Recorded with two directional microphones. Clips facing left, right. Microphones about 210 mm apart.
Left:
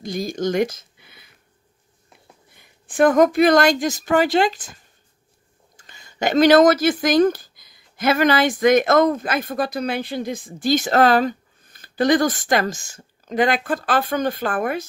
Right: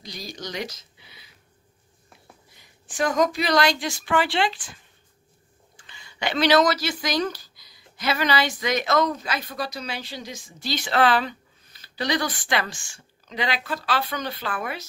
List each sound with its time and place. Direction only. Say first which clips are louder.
0.0 s speech: left 13 dB; 50° left (ahead or behind)
2.5 s speech: left 9 dB; 55° left (ahead or behind)
5.8 s speech: left 7 dB; 45° left (ahead or behind)